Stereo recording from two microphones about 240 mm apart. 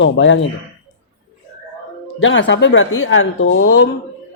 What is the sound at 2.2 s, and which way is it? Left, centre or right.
A woman's voice, left.